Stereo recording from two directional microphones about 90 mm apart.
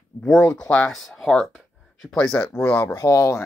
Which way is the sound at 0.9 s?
Centre (ahead or behind).